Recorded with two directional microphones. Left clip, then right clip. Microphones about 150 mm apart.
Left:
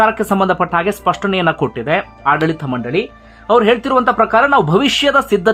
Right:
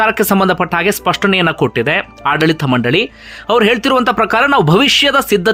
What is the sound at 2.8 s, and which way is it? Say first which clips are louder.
Speech: right 3 dB; 35° right (ahead or behind).